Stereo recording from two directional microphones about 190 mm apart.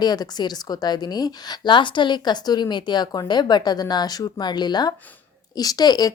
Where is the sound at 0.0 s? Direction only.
20° left (ahead or behind).